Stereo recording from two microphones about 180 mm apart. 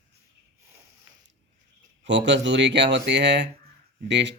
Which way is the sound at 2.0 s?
80° right.